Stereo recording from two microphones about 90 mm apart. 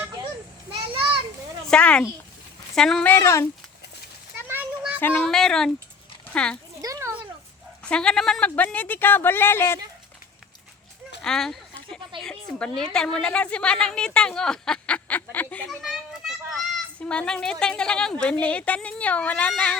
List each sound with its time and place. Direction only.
0.7 s children playing: 75° right (ahead or behind)
1.6 s a woman's voice: 10° left (ahead or behind)
3.1 s speech: 30° left (ahead or behind)
4.9 s speech: 20° left (ahead or behind)
5.2 s a woman's voice: 5° left (ahead or behind)
6.8 s a sound: 40° right (ahead or behind)
7.9 s speech: 10° left (ahead or behind); by 9.8 s 25° left (ahead or behind)
11.2 s a sound: 5° left (ahead or behind)
12.2 s a woman's voice: 10° left (ahead or behind)
15.8 s children playing: 5° right (ahead or behind)
17.0 s a woman's voice: 10° left (ahead or behind)